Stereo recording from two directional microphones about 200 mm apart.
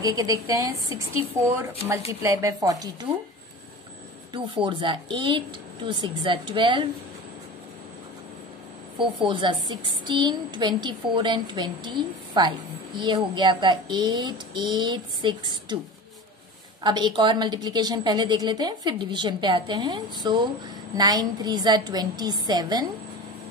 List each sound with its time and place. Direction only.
0.0 s speech: 20° right (ahead or behind)
4.6 s a woman's voice: 25° right (ahead or behind)
9.3 s a woman's voice: 25° right (ahead or behind)
16.8 s a woman's voice: 20° right (ahead or behind)